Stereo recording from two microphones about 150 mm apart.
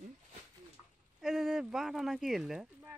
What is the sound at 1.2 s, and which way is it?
Speech, centre (ahead or behind).